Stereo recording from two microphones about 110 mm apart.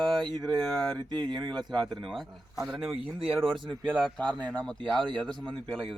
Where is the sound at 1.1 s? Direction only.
40° right (ahead or behind).